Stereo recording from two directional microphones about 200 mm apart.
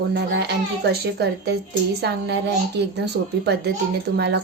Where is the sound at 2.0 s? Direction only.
55° right (ahead or behind).